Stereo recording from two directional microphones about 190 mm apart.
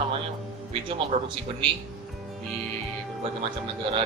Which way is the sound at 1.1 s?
35° right (ahead or behind).